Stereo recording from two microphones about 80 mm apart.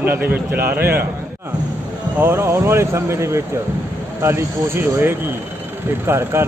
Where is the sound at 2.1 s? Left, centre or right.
Right.